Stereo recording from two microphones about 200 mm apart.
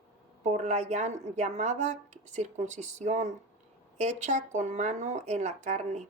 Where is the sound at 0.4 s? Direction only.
35° right (ahead or behind).